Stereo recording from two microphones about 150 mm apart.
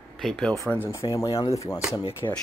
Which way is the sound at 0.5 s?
20° left (ahead or behind).